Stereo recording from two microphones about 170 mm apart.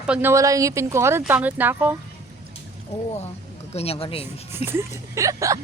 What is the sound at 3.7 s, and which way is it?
Speech, 35° left (ahead or behind).